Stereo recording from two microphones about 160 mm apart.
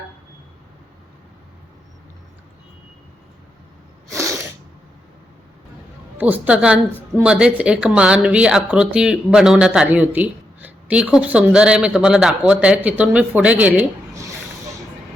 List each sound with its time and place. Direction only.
4.1 s sneeze: 20° right (ahead or behind)
6.1 s a man's voice: 10° right (ahead or behind)
14.3 s snake: 20° right (ahead or behind)